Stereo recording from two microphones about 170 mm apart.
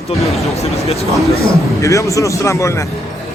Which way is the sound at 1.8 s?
20° left (ahead or behind).